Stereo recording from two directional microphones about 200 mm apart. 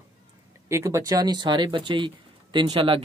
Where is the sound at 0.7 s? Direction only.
15° right (ahead or behind).